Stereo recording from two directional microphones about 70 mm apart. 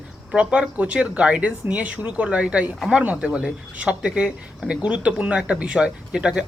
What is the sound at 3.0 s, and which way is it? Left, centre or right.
Speech, right.